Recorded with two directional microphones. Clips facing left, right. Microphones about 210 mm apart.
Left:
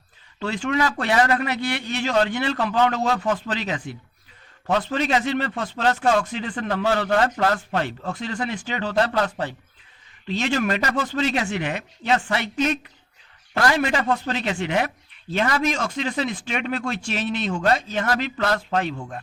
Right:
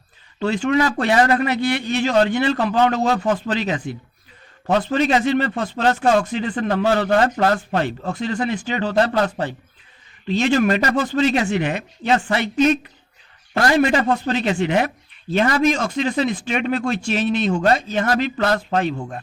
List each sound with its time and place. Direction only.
0.3 s a man's voice: 40° right (ahead or behind)